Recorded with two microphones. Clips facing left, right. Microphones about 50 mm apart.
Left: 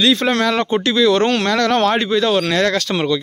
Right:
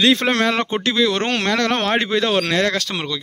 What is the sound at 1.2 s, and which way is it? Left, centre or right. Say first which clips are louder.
Speech: left 3 dB; right.